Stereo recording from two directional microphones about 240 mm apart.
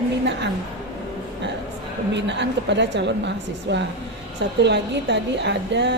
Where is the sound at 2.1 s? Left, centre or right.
Right.